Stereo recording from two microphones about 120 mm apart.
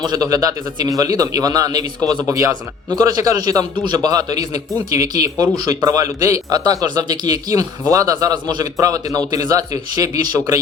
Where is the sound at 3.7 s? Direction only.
40° right (ahead or behind).